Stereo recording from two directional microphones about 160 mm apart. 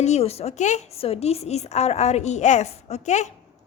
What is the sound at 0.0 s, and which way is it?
A woman's voice, 40° left (ahead or behind).